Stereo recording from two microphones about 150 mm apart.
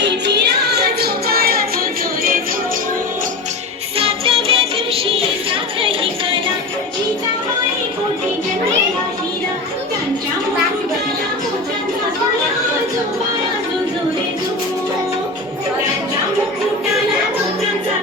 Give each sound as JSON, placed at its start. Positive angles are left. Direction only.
{"t": 0.3, "sound": "music", "side_deg": -90}
{"t": 3.9, "sound": "music", "side_deg": -40}